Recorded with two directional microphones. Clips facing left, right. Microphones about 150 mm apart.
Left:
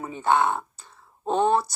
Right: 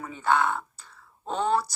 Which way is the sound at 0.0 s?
25° left (ahead or behind).